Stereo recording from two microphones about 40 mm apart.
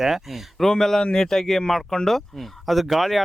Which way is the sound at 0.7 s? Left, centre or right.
Centre.